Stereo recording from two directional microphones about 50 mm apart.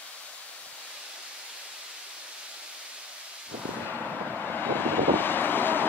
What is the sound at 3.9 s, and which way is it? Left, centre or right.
Vehicle, left.